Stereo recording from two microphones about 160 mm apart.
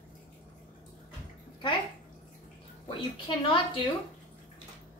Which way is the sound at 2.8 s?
30° left (ahead or behind).